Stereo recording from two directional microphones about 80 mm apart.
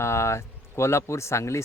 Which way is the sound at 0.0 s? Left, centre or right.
Left.